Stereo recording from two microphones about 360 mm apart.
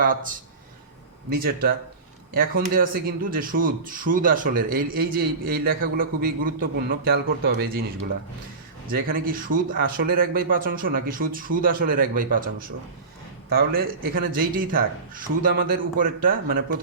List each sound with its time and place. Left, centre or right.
0.0 s speech: right
1.4 s speech: right
8.9 s speech: right